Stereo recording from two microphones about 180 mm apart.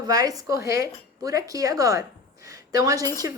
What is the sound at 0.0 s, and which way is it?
A woman's voice, 20° right (ahead or behind).